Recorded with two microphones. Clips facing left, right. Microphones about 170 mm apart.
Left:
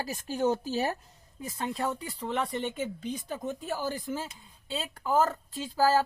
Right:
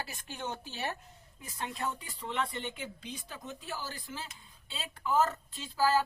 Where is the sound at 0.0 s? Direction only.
40° left (ahead or behind).